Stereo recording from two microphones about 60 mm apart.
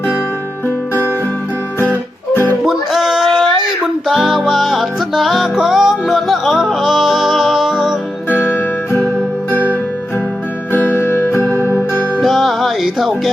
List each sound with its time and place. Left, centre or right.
1.8 s music: left
2.6 s music: centre
8.3 s music: left
12.2 s music: centre